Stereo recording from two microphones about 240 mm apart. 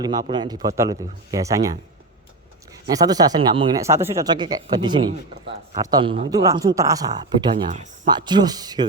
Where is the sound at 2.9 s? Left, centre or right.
Centre.